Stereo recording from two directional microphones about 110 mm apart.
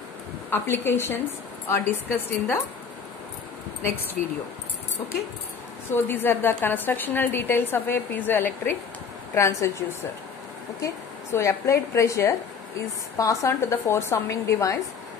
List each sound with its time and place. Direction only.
0.5 s speech: 20° left (ahead or behind)
3.8 s speech: 20° left (ahead or behind)
5.9 s speech: 20° left (ahead or behind)
11.3 s speech: 25° left (ahead or behind)